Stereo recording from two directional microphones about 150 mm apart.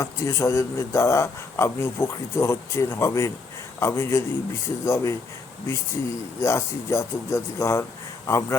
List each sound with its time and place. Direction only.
0.0 s a man's voice: 20° left (ahead or behind)
6.4 s a man's voice: 20° left (ahead or behind)